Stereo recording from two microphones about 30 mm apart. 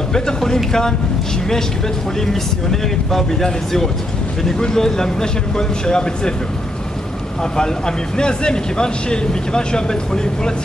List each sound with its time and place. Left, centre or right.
0.1 s speech: left
2.7 s speech: centre
4.6 s speech: left
7.5 s speech: left